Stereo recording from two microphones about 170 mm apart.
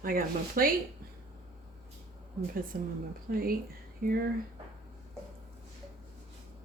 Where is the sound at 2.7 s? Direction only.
55° right (ahead or behind).